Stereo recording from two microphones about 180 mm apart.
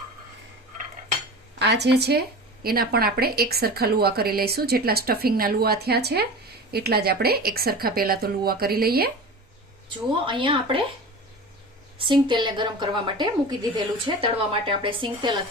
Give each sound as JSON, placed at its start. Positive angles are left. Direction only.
{"t": 1.5, "sound": "a woman's voice", "side_deg": -75}
{"t": 10.2, "sound": "a woman's voice", "side_deg": -25}
{"t": 11.9, "sound": "a woman's voice", "side_deg": -25}